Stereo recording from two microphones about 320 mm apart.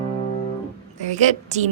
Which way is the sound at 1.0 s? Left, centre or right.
Right.